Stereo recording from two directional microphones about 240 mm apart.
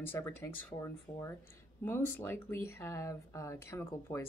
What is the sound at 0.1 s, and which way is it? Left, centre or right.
Speech, centre.